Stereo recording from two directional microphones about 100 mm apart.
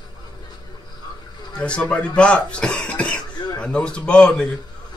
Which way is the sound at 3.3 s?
45° left (ahead or behind).